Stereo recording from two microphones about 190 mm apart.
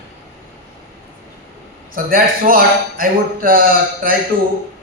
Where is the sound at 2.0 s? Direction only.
50° right (ahead or behind).